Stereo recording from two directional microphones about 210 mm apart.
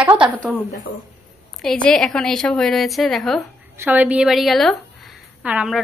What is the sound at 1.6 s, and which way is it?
A woman's voice, 5° left (ahead or behind).